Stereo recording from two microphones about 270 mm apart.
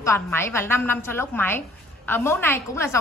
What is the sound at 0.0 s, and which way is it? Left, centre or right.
A woman's voice, centre.